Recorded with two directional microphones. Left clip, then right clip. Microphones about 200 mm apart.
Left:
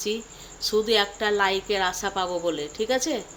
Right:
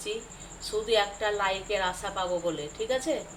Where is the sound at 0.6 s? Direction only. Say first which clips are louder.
Left 4 dB; 60° left (ahead or behind).